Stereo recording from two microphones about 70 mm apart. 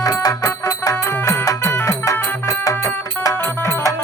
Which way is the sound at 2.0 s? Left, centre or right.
Left.